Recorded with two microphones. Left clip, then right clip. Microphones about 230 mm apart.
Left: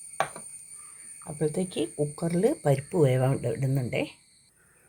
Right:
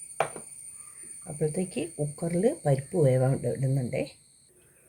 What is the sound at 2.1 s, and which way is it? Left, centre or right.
Speech, left.